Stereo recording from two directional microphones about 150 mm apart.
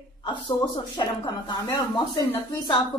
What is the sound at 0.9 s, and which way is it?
Speech, 30° left (ahead or behind).